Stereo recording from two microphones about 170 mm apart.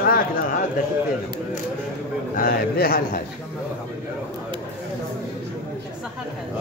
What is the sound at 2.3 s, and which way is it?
Speech, 60° left (ahead or behind).